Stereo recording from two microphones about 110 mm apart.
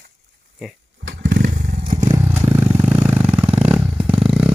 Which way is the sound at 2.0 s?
30° right (ahead or behind).